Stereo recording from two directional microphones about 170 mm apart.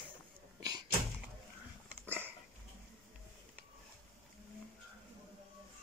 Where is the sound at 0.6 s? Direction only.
25° right (ahead or behind).